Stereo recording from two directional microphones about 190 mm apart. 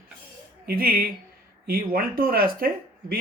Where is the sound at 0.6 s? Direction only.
50° right (ahead or behind).